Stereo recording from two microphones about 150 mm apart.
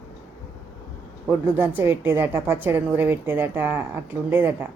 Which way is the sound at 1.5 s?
15° right (ahead or behind).